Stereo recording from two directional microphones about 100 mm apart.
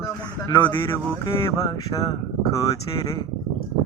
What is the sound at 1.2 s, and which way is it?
Speech, 35° left (ahead or behind).